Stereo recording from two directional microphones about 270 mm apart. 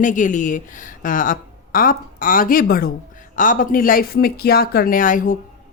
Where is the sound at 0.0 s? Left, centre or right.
Left.